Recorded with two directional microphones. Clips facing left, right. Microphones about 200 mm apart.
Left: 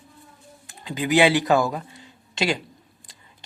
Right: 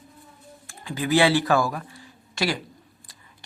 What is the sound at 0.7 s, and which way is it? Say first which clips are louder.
Speech: left 1 dB; 20° left (ahead or behind).